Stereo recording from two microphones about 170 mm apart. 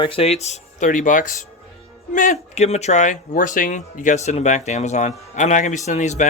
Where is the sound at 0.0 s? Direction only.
35° left (ahead or behind).